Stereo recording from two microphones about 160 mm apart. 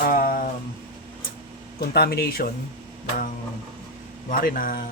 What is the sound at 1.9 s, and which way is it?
Speech, 80° left.